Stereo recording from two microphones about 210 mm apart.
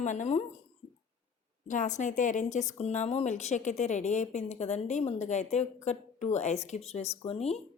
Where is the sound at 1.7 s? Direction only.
35° left (ahead or behind).